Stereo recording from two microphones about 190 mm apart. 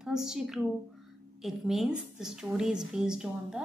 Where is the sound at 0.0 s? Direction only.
5° right (ahead or behind).